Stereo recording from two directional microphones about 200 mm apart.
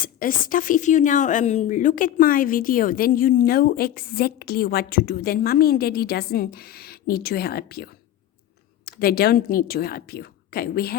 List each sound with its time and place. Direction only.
0.0 s a woman's voice: 45° left (ahead or behind)